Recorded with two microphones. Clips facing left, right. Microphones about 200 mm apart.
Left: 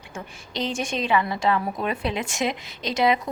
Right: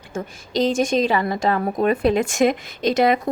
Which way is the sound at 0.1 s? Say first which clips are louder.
Right 9 dB; 45° right (ahead or behind).